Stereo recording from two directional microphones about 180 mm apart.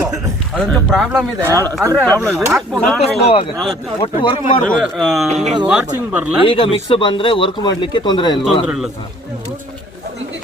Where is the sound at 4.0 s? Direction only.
30° left (ahead or behind).